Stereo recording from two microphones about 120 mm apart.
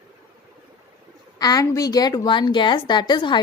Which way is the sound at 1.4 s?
30° left (ahead or behind).